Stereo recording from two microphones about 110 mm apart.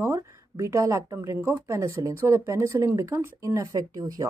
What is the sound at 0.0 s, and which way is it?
Speech, 25° right (ahead or behind).